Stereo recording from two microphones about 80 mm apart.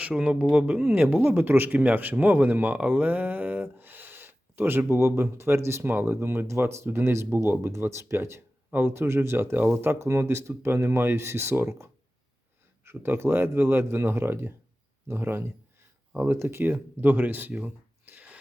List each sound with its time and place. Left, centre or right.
0.0 s speech: centre